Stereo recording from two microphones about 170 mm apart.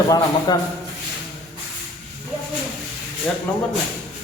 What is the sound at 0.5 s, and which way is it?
Speech, 25° left (ahead or behind).